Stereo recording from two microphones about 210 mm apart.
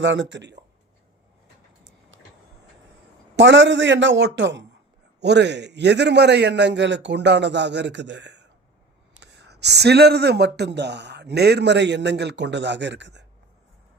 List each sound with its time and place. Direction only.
0.0 s speech: 60° right (ahead or behind)
3.3 s speech: 60° right (ahead or behind)